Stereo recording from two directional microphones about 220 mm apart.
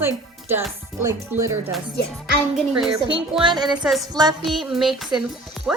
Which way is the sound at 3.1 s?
20° right (ahead or behind).